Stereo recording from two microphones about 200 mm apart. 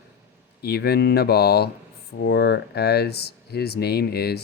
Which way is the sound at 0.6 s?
55° left (ahead or behind).